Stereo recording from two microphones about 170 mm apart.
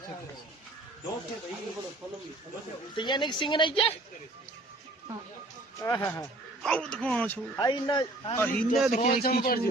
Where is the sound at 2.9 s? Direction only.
25° left (ahead or behind).